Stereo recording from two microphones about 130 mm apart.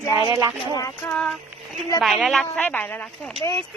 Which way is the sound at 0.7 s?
25° left (ahead or behind).